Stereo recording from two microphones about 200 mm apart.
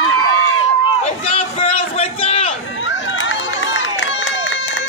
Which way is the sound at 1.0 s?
30° left (ahead or behind).